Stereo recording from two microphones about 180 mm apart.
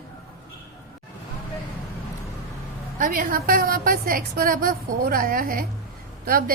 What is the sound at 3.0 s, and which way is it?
A woman's voice, 50° right (ahead or behind).